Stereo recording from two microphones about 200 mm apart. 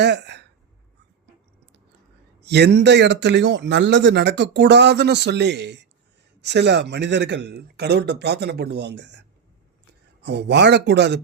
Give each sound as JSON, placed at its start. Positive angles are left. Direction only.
{"t": 0.0, "sound": "speech", "side_deg": -60}
{"t": 2.4, "sound": "a man's voice", "side_deg": -55}
{"t": 10.2, "sound": "a man's voice", "side_deg": -60}